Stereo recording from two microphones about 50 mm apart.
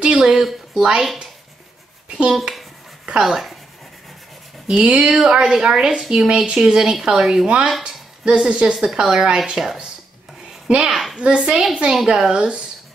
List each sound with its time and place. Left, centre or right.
0.2 s a woman's voice: centre
4.8 s a woman's voice: right
5.1 s a woman's voice: centre
10.7 s a woman's voice: right